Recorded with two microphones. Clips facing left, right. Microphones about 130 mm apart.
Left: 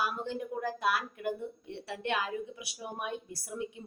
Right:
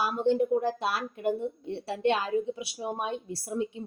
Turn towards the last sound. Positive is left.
turn(degrees=-30)  # may be behind; listen again after turning